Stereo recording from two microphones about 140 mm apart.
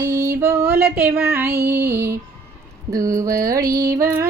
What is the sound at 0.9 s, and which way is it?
Female singing, 10° right (ahead or behind).